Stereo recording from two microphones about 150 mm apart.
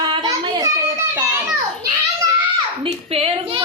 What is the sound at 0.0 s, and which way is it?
Child singing, 25° right (ahead or behind).